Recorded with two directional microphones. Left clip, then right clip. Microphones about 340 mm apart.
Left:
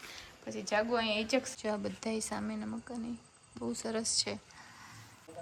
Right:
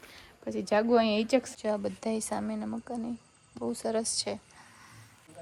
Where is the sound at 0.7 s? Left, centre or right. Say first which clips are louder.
Right 6 dB; centre.